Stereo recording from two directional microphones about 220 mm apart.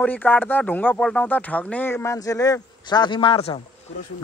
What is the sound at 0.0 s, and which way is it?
Speech, 5° left (ahead or behind).